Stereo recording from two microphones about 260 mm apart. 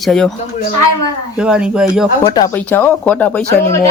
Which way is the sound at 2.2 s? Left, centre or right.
Centre.